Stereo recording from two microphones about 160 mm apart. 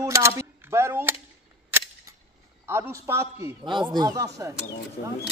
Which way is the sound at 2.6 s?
15° right (ahead or behind).